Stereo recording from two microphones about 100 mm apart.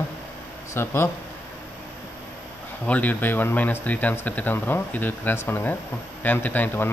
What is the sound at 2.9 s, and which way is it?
Speech, 15° left (ahead or behind).